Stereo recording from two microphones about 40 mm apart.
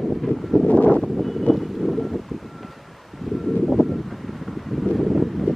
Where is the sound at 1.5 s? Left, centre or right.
Centre.